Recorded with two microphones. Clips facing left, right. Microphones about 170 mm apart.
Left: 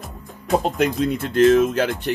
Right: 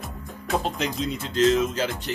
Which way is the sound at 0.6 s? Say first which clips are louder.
Left 7 dB; 55° left (ahead or behind).